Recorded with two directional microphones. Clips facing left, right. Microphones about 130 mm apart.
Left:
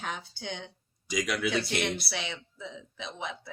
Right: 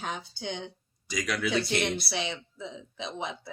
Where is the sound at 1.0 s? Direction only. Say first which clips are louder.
Left 1 dB; 10° left (ahead or behind).